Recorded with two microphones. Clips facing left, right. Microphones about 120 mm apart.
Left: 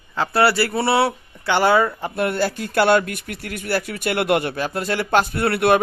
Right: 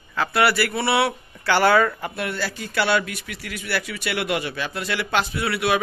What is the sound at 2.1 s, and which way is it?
Speech, 50° left (ahead or behind).